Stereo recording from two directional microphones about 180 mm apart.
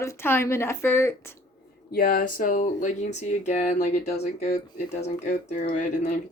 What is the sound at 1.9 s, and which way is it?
Speech, 55° left (ahead or behind).